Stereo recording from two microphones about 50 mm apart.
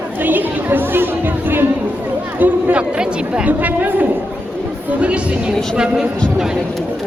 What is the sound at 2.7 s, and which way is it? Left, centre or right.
Speech, centre.